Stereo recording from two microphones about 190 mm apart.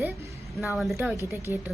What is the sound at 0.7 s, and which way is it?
Speech, centre (ahead or behind).